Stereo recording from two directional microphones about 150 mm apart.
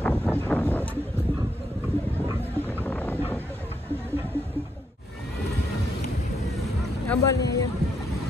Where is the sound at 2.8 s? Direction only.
10° left (ahead or behind).